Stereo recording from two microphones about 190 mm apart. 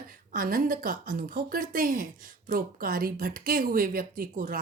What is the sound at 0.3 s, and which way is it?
A woman's voice, 50° right (ahead or behind).